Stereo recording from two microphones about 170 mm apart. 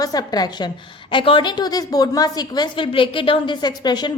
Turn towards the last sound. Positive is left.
turn(degrees=25)  # may be behind; listen again after turning